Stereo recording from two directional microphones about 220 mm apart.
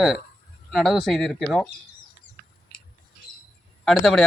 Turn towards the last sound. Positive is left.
turn(degrees=0)  # may be behind; listen again after turning